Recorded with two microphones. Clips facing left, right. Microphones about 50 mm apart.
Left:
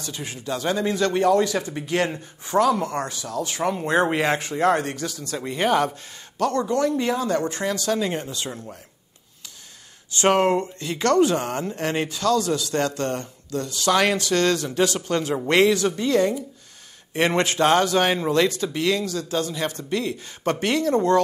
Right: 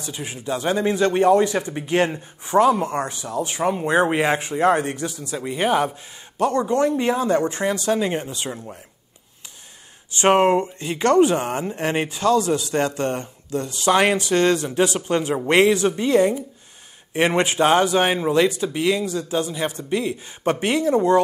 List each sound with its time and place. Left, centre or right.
0.0 s speech: centre
6.3 s speech: right
10.1 s speech: right